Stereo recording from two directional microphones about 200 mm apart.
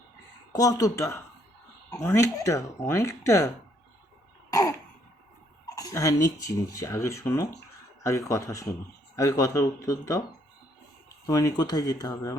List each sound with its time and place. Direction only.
0.5 s speech: 15° left (ahead or behind)
5.7 s speech: 15° left (ahead or behind)
11.3 s speech: 15° left (ahead or behind)